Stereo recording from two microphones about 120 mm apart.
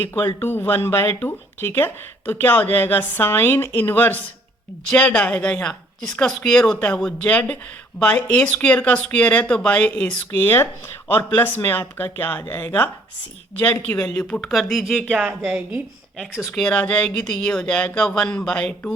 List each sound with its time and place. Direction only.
0.0 s a woman's voice: 20° left (ahead or behind)